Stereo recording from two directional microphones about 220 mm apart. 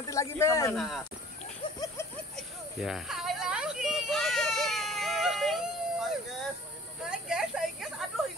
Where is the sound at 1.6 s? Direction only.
15° left (ahead or behind).